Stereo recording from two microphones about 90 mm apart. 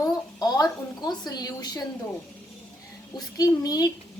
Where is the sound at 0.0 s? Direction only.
45° left (ahead or behind).